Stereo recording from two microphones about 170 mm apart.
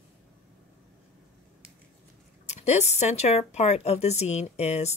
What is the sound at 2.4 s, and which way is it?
A woman's voice, 40° left (ahead or behind).